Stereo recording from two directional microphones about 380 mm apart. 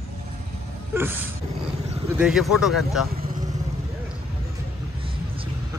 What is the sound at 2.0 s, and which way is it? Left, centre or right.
Speech, centre.